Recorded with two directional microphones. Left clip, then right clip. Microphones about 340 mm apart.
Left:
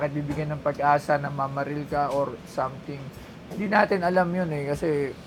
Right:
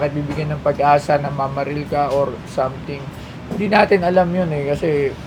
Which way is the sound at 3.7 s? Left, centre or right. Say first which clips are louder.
Right 7 dB; left.